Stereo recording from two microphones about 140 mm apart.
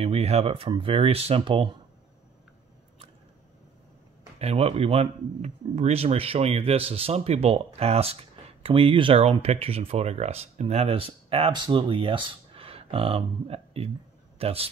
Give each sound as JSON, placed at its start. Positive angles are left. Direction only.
{"t": 0.0, "sound": "speech", "side_deg": -45}
{"t": 4.4, "sound": "speech", "side_deg": -45}